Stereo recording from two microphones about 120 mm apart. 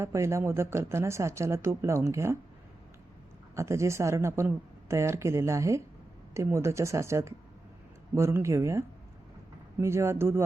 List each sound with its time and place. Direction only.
0.0 s speech: 25° right (ahead or behind)
3.5 s speech: 25° right (ahead or behind)
9.8 s speech: 20° right (ahead or behind)